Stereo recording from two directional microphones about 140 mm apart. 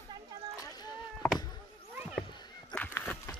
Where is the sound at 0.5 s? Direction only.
25° left (ahead or behind).